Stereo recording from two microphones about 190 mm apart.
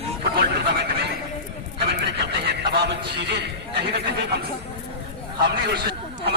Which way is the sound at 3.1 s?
60° right (ahead or behind).